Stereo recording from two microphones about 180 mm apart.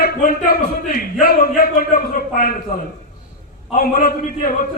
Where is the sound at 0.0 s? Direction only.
55° left (ahead or behind).